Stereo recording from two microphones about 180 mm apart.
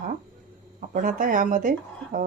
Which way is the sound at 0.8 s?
50° right (ahead or behind).